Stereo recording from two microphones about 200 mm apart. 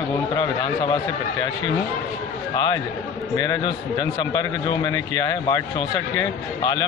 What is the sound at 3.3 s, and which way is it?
A man's voice, 15° left (ahead or behind).